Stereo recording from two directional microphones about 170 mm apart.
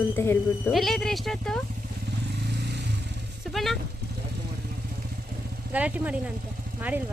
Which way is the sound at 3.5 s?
Centre (ahead or behind).